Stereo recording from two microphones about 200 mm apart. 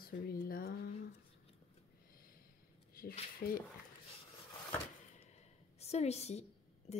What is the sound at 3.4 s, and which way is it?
Speech, 50° left (ahead or behind).